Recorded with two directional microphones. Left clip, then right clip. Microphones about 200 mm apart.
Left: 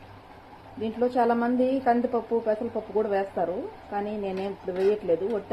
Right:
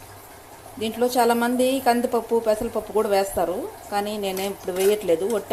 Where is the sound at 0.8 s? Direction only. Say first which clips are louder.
Right 4 dB; 20° right (ahead or behind).